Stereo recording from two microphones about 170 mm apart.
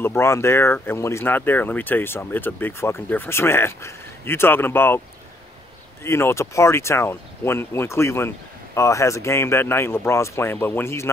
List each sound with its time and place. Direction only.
0.0 s speech: 15° left (ahead or behind)
6.0 s speech: 15° left (ahead or behind)